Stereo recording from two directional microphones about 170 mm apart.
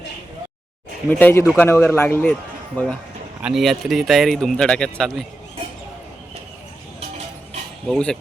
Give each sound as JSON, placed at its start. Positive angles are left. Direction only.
{"t": 1.2, "sound": "a man's voice", "side_deg": 15}
{"t": 3.4, "sound": "speech", "side_deg": 0}
{"t": 7.9, "sound": "speech", "side_deg": 5}